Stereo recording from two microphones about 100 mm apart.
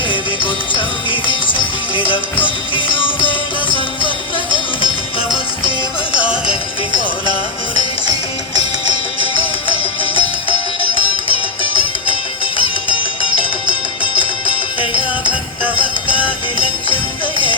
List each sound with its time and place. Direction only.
0.1 s music: 55° left (ahead or behind)
9.6 s music: 55° right (ahead or behind)
15.3 s music: 15° right (ahead or behind)